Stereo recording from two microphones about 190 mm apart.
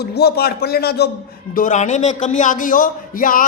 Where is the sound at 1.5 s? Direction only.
40° left (ahead or behind).